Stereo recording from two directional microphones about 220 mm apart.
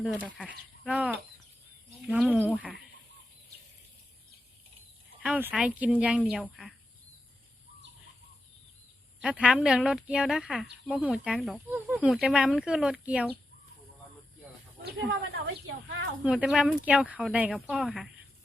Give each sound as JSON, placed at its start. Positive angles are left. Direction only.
{"t": 0.0, "sound": "speech", "side_deg": 0}
{"t": 5.2, "sound": "speech", "side_deg": -5}
{"t": 9.2, "sound": "speech", "side_deg": -5}
{"t": 15.4, "sound": "a woman's voice", "side_deg": -55}
{"t": 16.2, "sound": "speech", "side_deg": -5}